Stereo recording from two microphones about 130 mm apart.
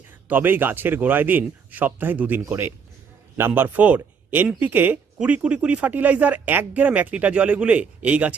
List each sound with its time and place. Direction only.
0.3 s speech: 15° right (ahead or behind)